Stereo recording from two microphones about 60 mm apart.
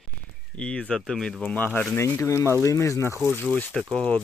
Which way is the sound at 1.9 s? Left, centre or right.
Left.